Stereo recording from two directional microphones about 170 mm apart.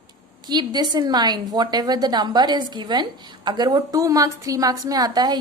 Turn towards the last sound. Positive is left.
turn(degrees=-20)  # may be behind; listen again after turning